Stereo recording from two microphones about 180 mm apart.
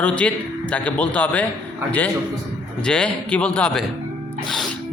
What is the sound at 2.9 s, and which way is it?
Speech, 5° left (ahead or behind).